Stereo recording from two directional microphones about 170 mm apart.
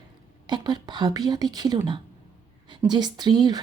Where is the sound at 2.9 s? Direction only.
25° right (ahead or behind).